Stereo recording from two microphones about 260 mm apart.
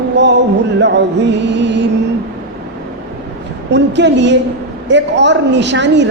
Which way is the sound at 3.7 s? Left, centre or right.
Right.